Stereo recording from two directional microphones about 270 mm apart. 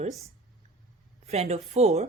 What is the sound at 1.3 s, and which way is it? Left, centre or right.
Speech, right.